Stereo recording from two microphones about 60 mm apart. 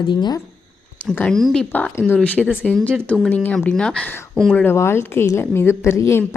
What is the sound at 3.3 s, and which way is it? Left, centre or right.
Speech, left.